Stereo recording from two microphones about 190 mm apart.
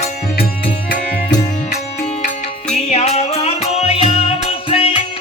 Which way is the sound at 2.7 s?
35° left (ahead or behind).